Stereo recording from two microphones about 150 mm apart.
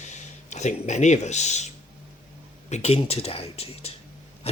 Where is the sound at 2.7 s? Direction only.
45° left (ahead or behind).